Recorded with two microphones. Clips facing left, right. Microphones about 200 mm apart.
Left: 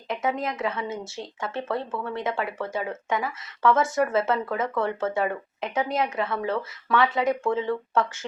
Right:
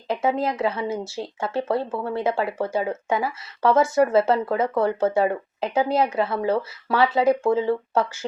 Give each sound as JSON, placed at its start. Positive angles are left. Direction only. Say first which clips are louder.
{"t": 0.1, "sound": "speech", "louder": "right 5 dB", "side_deg": -30}